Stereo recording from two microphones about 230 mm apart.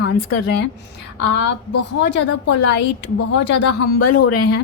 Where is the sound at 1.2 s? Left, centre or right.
Left.